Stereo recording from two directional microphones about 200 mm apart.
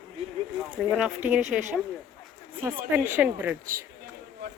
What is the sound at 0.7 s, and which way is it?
Speech, 5° right (ahead or behind).